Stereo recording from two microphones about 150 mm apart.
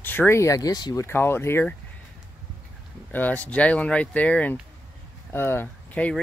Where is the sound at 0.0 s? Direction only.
15° left (ahead or behind).